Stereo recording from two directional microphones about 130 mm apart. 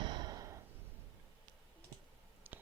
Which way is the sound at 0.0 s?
35° right (ahead or behind).